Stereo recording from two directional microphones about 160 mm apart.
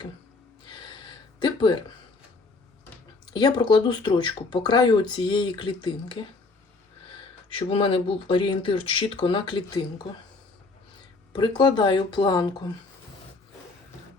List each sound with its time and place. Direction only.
0.7 s a sound: 30° left (ahead or behind)
3.3 s speech: 25° left (ahead or behind)
7.5 s speech: 35° left (ahead or behind)
11.3 s speech: 30° left (ahead or behind)